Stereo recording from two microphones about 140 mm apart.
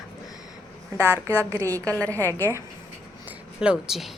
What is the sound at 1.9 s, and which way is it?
Speech, 10° left (ahead or behind).